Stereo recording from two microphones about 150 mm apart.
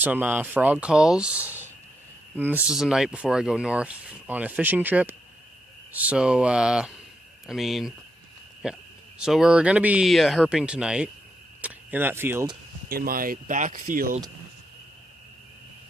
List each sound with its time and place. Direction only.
0.0 s speech: 10° right (ahead or behind)
12.9 s speech: 75° right (ahead or behind)